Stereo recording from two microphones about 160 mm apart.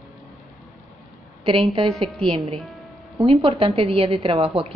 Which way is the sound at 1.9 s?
Centre (ahead or behind).